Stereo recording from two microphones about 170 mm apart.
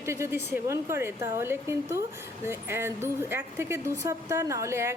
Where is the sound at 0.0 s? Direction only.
15° right (ahead or behind).